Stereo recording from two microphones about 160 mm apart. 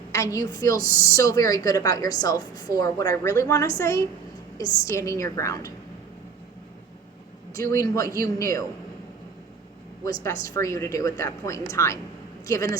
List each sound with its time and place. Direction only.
0.1 s a woman's voice: 20° left (ahead or behind)
0.8 s speech: 65° right (ahead or behind)
1.1 s a woman's voice: 20° left (ahead or behind)
7.5 s a woman's voice: 20° left (ahead or behind)
10.0 s a woman's voice: 20° left (ahead or behind)